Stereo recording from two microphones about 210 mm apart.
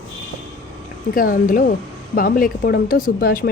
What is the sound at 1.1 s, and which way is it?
A woman's voice, 40° left (ahead or behind).